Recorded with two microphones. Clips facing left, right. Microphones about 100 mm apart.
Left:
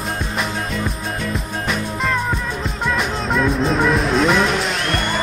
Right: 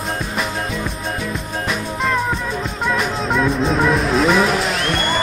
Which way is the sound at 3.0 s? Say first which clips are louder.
Right 1 dB; centre (ahead or behind).